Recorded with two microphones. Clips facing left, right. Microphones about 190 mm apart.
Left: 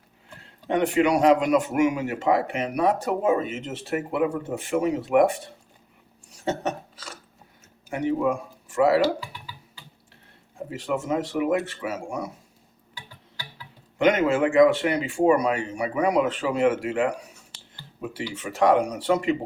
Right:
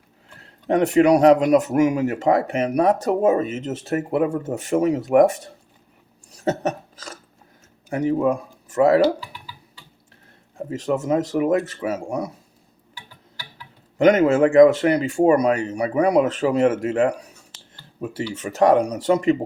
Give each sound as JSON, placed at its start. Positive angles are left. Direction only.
{"t": 0.7, "sound": "a man's voice", "side_deg": -40}
{"t": 6.4, "sound": "a sound", "side_deg": -40}
{"t": 7.9, "sound": "a man's voice", "side_deg": -40}
{"t": 10.7, "sound": "a man's voice", "side_deg": -40}
{"t": 14.0, "sound": "a man's voice", "side_deg": -40}
{"t": 18.1, "sound": "a man's voice", "side_deg": -40}